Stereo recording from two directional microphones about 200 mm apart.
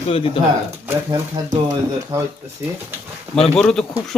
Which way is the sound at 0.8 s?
15° right (ahead or behind).